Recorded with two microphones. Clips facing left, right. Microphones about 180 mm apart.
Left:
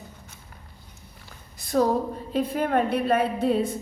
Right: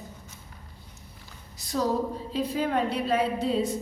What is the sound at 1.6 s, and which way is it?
A woman's voice, 55° left (ahead or behind).